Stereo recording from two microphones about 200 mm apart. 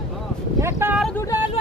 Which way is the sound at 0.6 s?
15° right (ahead or behind).